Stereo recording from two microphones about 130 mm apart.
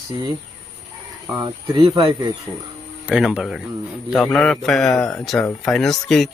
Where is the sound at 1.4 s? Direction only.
35° right (ahead or behind).